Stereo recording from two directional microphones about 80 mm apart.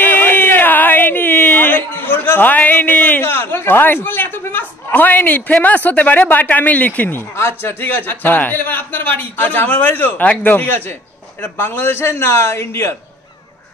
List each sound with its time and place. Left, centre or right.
0.0 s a man's voice: left